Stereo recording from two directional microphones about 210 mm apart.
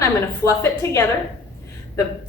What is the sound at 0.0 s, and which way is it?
A woman's voice, 15° left (ahead or behind).